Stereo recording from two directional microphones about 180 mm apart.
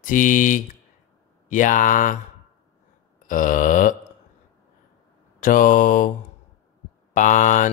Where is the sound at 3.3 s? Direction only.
45° left (ahead or behind).